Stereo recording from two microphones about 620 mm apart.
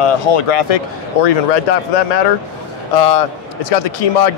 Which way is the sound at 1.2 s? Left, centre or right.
Left.